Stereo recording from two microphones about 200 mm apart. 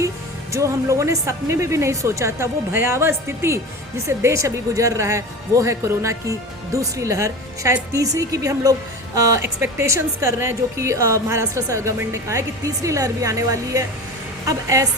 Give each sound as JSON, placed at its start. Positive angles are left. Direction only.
{"t": 0.5, "sound": "speech", "side_deg": -15}